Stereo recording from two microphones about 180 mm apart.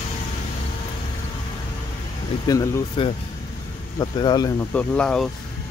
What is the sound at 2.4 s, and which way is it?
Speech, 20° left (ahead or behind).